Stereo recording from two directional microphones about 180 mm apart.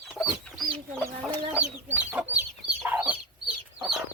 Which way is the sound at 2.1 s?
10° right (ahead or behind).